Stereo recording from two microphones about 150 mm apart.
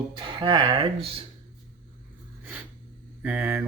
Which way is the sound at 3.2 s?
10° right (ahead or behind).